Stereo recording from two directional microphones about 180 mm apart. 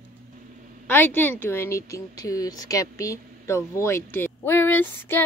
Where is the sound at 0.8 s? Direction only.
10° left (ahead or behind).